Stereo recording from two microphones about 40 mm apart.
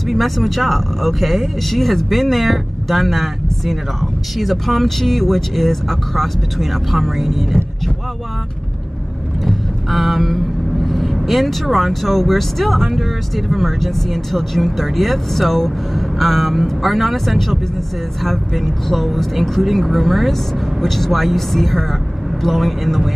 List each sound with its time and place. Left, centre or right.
0.1 s speech: centre
9.4 s speech: centre